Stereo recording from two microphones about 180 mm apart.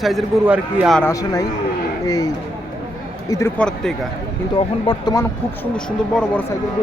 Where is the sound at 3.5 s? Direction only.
5° left (ahead or behind).